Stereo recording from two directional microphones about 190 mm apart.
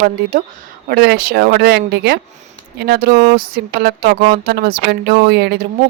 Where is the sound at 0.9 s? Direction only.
55° right (ahead or behind).